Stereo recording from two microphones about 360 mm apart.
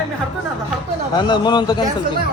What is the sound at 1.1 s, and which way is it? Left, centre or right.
Speech, centre.